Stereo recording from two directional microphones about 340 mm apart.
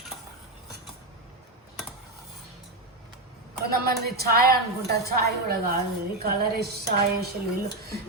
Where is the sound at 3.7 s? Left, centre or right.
Right.